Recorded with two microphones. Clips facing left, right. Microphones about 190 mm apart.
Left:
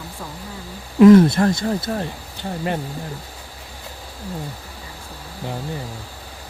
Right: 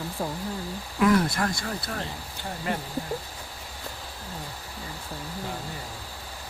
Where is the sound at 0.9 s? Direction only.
25° left (ahead or behind).